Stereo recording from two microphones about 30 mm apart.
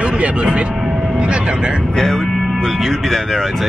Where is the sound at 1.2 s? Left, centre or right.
Right.